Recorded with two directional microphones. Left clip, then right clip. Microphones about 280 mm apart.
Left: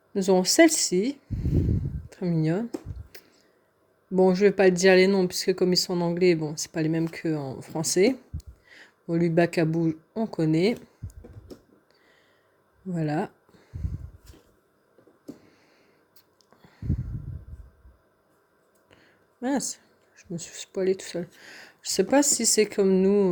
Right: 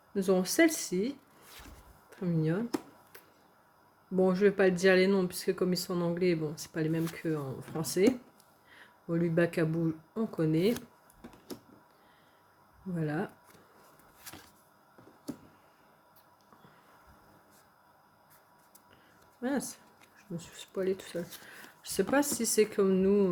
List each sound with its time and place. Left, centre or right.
0.1 s speech: left
3.1 s a sound: left
4.1 s speech: left
12.9 s speech: left
19.4 s speech: left